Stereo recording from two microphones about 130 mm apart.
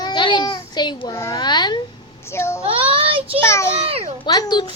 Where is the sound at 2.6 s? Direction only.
45° right (ahead or behind).